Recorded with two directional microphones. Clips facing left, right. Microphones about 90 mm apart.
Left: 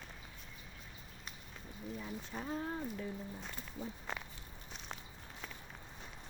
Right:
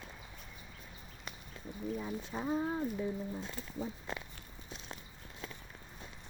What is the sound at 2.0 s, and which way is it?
Speech, 15° right (ahead or behind).